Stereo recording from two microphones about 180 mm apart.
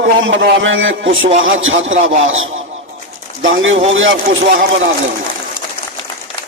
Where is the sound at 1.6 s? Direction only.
90° right.